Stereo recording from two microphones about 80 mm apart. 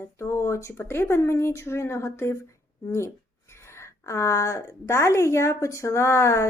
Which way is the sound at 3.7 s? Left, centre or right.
Left.